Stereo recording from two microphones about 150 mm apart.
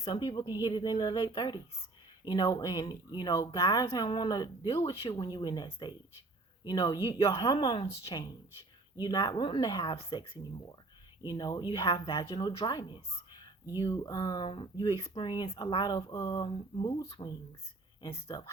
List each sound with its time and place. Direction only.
0.0 s speech: 30° left (ahead or behind)